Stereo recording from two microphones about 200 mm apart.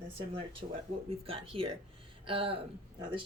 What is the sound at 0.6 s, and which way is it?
Speech, 35° right (ahead or behind).